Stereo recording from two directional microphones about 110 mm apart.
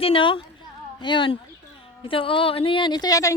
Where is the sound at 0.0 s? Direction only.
55° left (ahead or behind).